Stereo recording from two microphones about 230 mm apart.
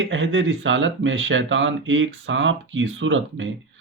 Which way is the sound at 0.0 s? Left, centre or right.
Right.